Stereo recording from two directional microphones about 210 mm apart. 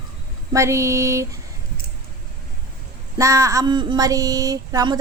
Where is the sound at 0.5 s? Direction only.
15° right (ahead or behind).